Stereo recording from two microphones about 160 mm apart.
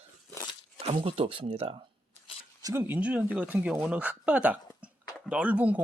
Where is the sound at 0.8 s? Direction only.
35° right (ahead or behind).